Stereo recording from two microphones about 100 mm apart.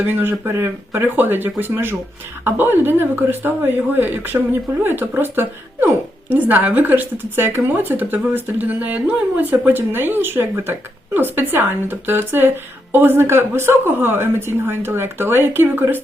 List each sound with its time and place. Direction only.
0.0 s a woman's voice: 20° right (ahead or behind)